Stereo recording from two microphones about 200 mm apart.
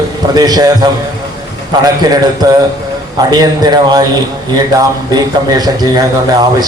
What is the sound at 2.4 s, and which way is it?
A man's voice, 20° right (ahead or behind).